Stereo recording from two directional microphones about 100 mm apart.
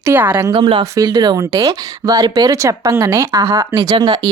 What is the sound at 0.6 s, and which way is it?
Speech, 60° right (ahead or behind).